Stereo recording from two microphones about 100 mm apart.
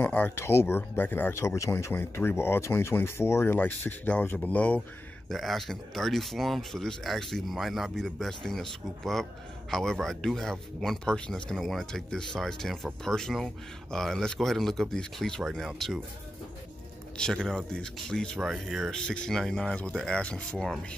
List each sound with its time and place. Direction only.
0.0 s speech: 20° left (ahead or behind)
5.3 s speech: 5° left (ahead or behind)
17.2 s speech: 5° left (ahead or behind)